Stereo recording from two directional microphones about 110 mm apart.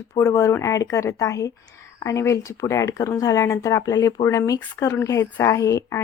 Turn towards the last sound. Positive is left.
turn(degrees=30)  # may be behind; listen again after turning